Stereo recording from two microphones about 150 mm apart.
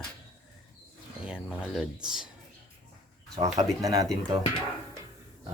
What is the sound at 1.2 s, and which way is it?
Speech, 5° right (ahead or behind).